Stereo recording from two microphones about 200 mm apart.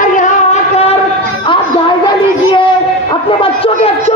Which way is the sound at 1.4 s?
25° left (ahead or behind).